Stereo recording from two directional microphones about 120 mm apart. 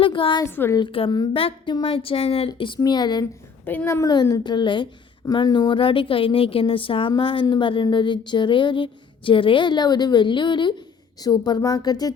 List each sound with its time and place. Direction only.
0.0 s speech: 45° left (ahead or behind)
0.4 s a woman's voice: 20° left (ahead or behind)
0.8 s speech: 50° left (ahead or behind)
2.5 s speech: 40° left (ahead or behind)
3.7 s a woman's voice: 15° left (ahead or behind)
4.1 s speech: 35° left (ahead or behind)